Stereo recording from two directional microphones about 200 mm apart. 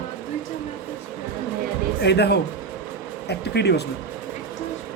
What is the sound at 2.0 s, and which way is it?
A man's voice, 55° left (ahead or behind).